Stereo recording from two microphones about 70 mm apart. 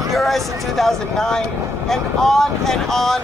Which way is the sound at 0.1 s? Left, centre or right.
Centre.